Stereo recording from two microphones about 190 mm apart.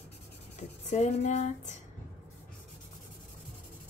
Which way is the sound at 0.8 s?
40° left (ahead or behind).